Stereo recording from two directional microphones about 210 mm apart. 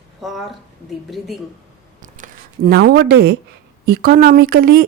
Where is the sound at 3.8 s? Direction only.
45° right (ahead or behind).